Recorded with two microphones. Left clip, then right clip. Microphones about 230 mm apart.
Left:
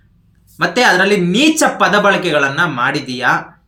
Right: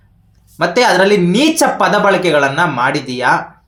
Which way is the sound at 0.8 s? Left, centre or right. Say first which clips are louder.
Right 1 dB; centre.